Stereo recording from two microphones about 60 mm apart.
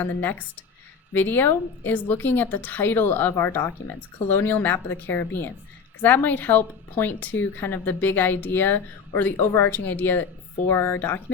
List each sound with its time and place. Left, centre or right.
0.0 s speech: left
9.4 s speech: left
9.7 s speech: left